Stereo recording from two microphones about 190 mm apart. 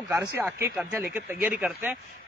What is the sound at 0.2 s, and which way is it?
A man's voice, 5° right (ahead or behind).